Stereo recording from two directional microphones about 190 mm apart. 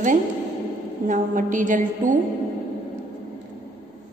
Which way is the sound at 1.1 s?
40° right (ahead or behind).